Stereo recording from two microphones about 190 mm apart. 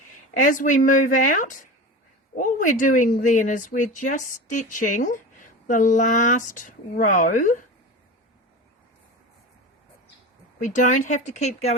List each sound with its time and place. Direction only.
0.4 s speech: 40° left (ahead or behind)
10.6 s speech: 40° left (ahead or behind)